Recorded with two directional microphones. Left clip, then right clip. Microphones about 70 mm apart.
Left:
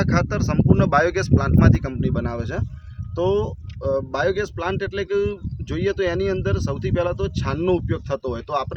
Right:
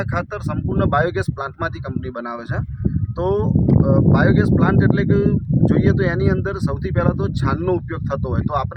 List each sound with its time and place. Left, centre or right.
0.0 s speech: left
3.2 s speech: left